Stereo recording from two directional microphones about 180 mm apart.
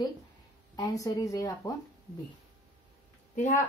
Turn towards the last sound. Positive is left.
turn(degrees=40)  # may be behind; listen again after turning